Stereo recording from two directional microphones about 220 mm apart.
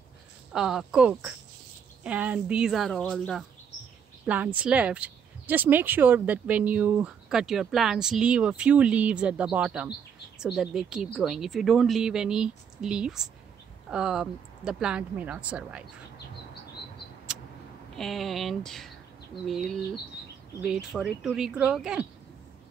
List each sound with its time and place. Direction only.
0.5 s speech: centre (ahead or behind)
17.9 s speech: centre (ahead or behind)